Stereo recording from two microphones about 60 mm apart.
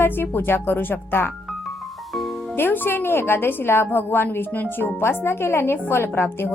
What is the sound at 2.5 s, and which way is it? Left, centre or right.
A woman's voice, left.